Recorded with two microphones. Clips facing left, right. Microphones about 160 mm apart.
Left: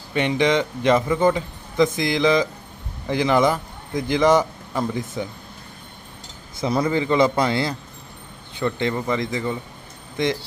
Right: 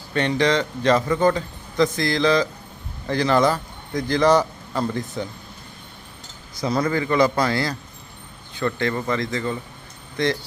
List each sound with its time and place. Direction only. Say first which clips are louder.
0.1 s a man's voice: left 1 dB; 15° left (ahead or behind)
6.6 s a man's voice: left 1 dB; 25° left (ahead or behind)